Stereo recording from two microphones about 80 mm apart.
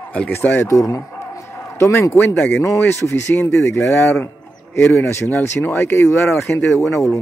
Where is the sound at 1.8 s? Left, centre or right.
Left.